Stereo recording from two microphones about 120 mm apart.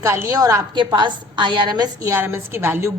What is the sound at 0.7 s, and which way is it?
A woman's voice, 40° right (ahead or behind).